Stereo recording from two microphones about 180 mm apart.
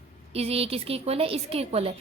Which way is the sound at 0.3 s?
35° right (ahead or behind).